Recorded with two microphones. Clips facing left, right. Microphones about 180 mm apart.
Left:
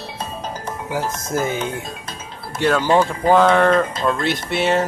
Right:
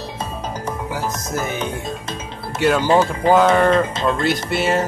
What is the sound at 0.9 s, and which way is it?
Speech, 25° left (ahead or behind).